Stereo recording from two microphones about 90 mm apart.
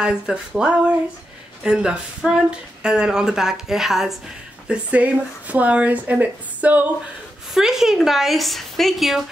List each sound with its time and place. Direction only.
0.0 s speech: 10° right (ahead or behind)
7.5 s speech: 5° right (ahead or behind)